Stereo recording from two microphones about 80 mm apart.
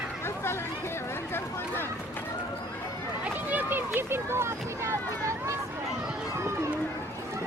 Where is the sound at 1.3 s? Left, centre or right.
Left.